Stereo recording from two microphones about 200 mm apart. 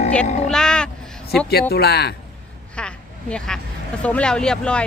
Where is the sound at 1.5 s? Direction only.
55° left (ahead or behind).